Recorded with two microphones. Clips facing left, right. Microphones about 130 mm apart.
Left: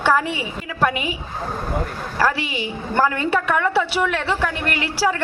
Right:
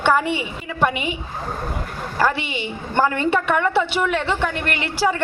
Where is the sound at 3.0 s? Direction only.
Centre (ahead or behind).